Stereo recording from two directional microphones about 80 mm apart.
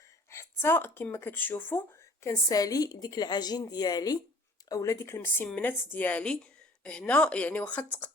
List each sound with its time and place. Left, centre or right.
0.3 s a sound: left
1.1 s speech: left
2.2 s a woman's voice: left
4.7 s speech: left
5.2 s a woman's voice: left